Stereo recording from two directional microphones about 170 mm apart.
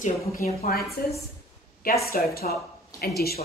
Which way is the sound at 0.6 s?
65° left (ahead or behind).